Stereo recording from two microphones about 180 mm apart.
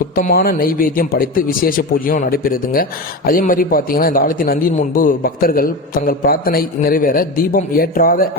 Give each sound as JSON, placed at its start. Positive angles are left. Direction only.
{"t": 0.2, "sound": "a man's voice", "side_deg": 55}